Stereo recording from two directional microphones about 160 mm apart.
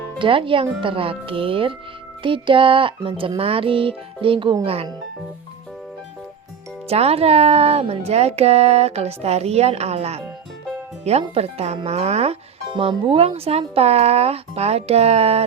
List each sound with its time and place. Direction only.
0.2 s speech: 35° right (ahead or behind)
6.8 s speech: 40° right (ahead or behind)